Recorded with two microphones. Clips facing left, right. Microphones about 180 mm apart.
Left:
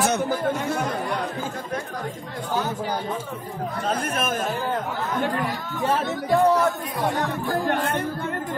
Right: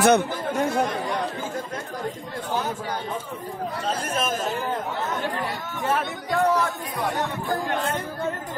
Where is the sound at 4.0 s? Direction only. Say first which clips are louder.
Left 1 dB; 55° left (ahead or behind).